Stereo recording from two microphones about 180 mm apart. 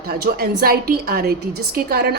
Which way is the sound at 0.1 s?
60° right (ahead or behind).